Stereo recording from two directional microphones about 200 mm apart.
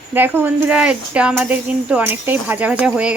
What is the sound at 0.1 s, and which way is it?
Speech, 10° right (ahead or behind).